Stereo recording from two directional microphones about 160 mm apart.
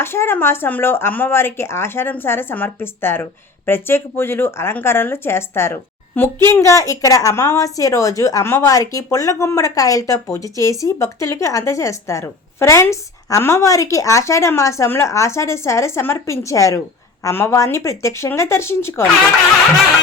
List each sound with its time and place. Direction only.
0.0 s a woman's voice: 15° left (ahead or behind)